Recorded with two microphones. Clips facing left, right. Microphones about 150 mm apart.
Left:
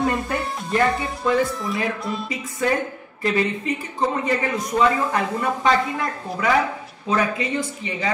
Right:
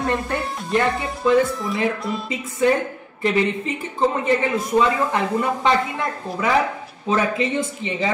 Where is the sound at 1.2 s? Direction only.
Centre (ahead or behind).